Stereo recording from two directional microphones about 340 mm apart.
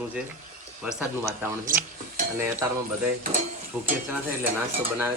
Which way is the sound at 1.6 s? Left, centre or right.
Right.